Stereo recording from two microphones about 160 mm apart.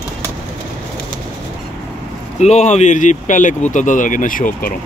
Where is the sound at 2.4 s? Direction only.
45° left (ahead or behind).